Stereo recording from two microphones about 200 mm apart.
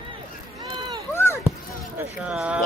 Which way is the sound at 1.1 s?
10° left (ahead or behind).